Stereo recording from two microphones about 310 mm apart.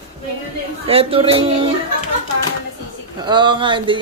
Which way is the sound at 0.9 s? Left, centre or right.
Centre.